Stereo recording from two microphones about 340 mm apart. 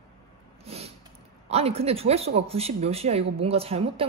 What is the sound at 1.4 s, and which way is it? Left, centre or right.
Speech, centre.